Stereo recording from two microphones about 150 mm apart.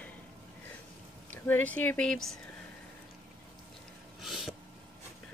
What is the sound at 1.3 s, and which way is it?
Speech, 10° left (ahead or behind).